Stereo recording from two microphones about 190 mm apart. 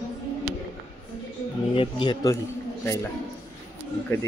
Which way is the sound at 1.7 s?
25° left (ahead or behind).